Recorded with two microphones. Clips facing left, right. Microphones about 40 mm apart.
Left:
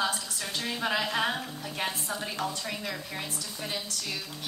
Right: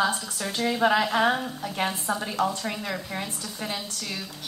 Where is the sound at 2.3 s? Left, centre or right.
Right.